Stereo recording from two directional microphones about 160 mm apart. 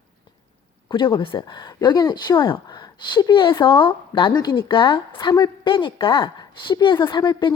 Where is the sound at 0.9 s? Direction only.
30° left (ahead or behind).